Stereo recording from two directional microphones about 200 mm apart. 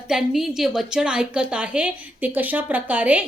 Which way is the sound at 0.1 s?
Centre (ahead or behind).